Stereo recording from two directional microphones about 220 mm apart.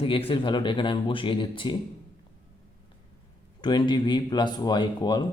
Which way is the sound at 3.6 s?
20° left (ahead or behind).